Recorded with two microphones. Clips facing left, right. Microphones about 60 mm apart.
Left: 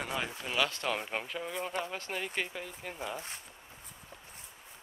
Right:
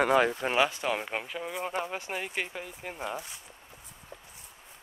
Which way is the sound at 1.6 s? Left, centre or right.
Centre.